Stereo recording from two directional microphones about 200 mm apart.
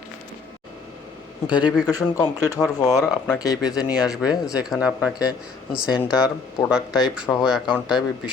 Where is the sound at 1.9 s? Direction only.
15° left (ahead or behind).